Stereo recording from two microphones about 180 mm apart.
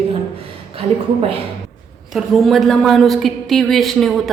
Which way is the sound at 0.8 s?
35° right (ahead or behind).